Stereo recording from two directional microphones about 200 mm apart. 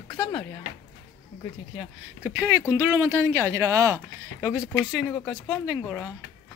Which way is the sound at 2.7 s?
15° right (ahead or behind).